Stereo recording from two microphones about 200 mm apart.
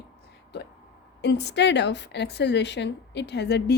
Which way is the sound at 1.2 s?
55° left (ahead or behind).